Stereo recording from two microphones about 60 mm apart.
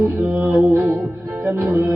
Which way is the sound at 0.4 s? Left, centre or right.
Right.